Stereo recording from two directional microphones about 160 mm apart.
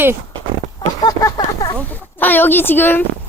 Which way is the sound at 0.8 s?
20° left (ahead or behind).